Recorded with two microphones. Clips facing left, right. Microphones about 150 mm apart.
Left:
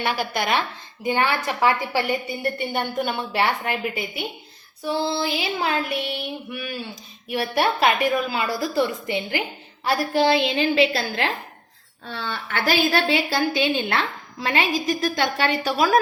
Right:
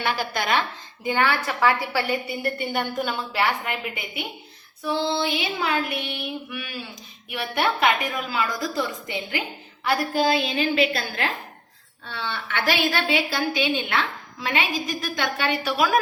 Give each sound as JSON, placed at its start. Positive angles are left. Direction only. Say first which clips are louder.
{"t": 0.0, "sound": "a woman's voice", "louder": "left 2 dB", "side_deg": 15}
{"t": 4.8, "sound": "a woman's voice", "louder": "even", "side_deg": 30}
{"t": 12.0, "sound": "a woman's voice", "louder": "left 1 dB", "side_deg": 40}